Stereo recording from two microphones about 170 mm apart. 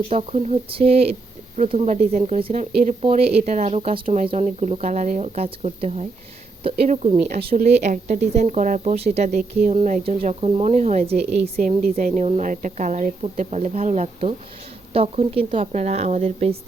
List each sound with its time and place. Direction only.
0.1 s speech: 40° right (ahead or behind)
4.0 s a woman's voice: 50° right (ahead or behind)
7.6 s speech: 45° right (ahead or behind)